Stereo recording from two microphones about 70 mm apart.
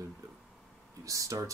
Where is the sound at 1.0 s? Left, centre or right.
Right.